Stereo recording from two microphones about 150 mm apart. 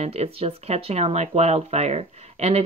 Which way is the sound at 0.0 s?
45° right (ahead or behind).